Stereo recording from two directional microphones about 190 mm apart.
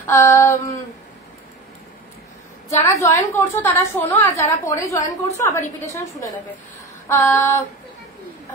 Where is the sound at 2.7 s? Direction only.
15° left (ahead or behind).